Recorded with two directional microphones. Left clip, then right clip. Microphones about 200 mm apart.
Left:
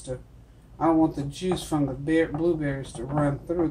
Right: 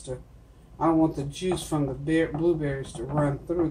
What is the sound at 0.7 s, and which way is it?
Speech, 30° left (ahead or behind).